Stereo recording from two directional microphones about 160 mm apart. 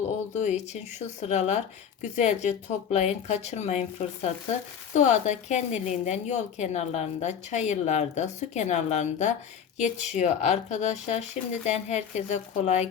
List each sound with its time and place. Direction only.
0.3 s a woman's voice: 45° left (ahead or behind)